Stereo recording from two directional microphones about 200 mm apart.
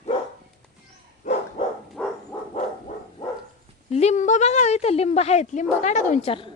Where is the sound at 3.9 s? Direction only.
35° left (ahead or behind).